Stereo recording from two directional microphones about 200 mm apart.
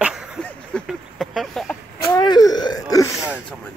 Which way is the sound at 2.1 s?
20° left (ahead or behind).